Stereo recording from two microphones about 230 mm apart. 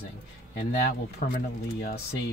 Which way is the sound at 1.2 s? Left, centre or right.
Left.